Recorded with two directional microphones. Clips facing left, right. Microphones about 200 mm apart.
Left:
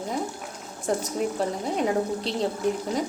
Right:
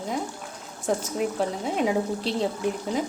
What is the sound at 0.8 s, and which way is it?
Speech, centre (ahead or behind).